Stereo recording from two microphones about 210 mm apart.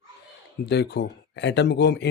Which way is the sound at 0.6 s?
55° left (ahead or behind).